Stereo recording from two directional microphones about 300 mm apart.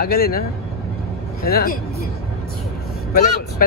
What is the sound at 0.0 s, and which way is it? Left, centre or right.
Speech, left.